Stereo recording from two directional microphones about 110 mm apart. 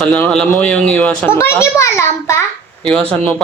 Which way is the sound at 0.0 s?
10° left (ahead or behind).